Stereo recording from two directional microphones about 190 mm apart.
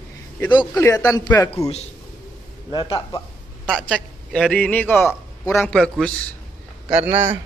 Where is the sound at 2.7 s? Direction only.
20° left (ahead or behind).